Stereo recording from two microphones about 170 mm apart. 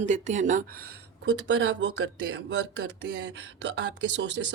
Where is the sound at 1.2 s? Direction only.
90° right.